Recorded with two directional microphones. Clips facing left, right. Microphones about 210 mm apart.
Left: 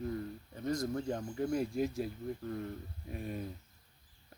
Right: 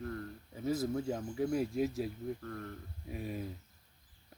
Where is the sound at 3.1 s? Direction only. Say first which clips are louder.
Even; centre (ahead or behind).